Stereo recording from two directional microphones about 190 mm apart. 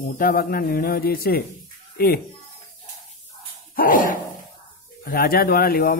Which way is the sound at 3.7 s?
45° left (ahead or behind).